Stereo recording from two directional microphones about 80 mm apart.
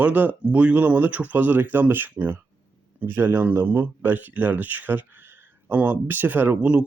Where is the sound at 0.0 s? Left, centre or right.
Right.